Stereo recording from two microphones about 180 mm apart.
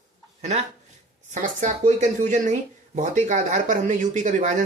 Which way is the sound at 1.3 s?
40° right (ahead or behind).